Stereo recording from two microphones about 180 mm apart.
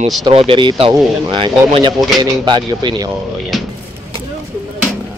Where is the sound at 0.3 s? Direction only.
30° right (ahead or behind).